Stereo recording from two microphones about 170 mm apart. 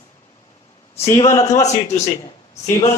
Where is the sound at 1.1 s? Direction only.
40° left (ahead or behind).